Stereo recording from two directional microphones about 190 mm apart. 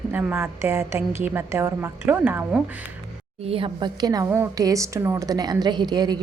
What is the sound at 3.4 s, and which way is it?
A woman's voice, 30° right (ahead or behind).